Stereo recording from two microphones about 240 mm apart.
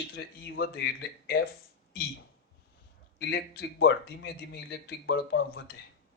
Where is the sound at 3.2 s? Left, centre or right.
Left.